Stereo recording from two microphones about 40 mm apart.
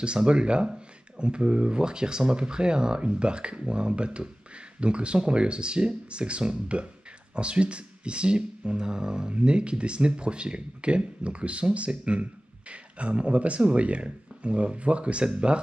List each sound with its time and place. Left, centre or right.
0.0 s speech: right